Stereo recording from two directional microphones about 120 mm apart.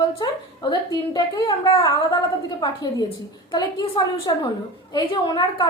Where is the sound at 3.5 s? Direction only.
35° left (ahead or behind).